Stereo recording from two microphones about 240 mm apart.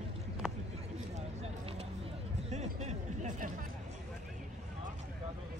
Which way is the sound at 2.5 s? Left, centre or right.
Right.